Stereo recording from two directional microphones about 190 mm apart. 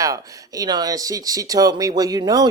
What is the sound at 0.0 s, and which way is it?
Speech, 20° right (ahead or behind).